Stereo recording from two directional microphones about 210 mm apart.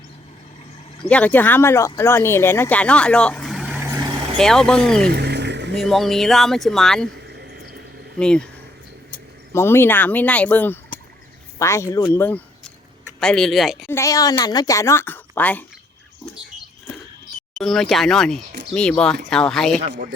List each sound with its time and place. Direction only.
1.0 s speech: 5° left (ahead or behind); by 4.0 s 10° right (ahead or behind)
4.4 s speech: 5° left (ahead or behind)
5.1 s roaring cats: 50° right (ahead or behind)
5.7 s speech: centre (ahead or behind)
7.3 s a sound: 50° right (ahead or behind)
8.2 s speech: 5° left (ahead or behind)
9.5 s speech: 10° left (ahead or behind)
13.8 s speech: 15° left (ahead or behind)
17.6 s speech: centre (ahead or behind)
19.9 s a man's voice: 45° right (ahead or behind)